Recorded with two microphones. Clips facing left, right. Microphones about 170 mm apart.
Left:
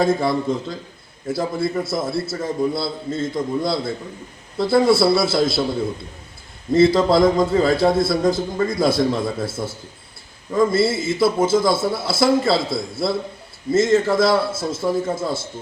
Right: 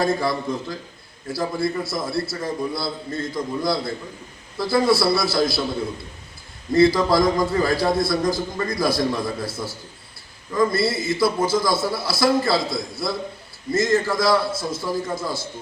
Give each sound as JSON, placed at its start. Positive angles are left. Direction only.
{"t": 0.0, "sound": "a man's voice", "side_deg": 25}
{"t": 6.7, "sound": "a man's voice", "side_deg": 25}